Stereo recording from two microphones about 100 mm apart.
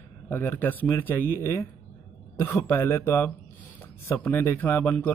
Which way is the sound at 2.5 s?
15° left (ahead or behind).